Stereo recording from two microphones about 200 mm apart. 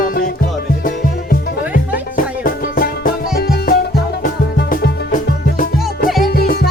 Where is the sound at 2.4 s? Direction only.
45° left (ahead or behind).